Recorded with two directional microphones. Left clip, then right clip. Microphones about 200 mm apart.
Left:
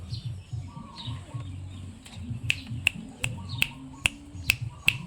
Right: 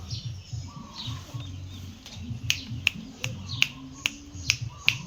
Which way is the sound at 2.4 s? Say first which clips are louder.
Even; 60° left (ahead or behind).